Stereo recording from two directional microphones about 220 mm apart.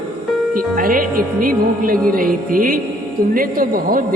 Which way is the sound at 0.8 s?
40° right (ahead or behind).